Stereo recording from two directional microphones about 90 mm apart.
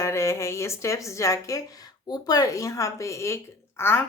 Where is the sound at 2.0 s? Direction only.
50° left (ahead or behind).